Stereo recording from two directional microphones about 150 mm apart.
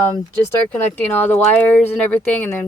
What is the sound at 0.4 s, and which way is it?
Speech, 15° left (ahead or behind).